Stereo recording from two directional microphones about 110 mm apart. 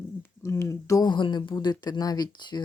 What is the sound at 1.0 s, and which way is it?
Speech, 45° left (ahead or behind).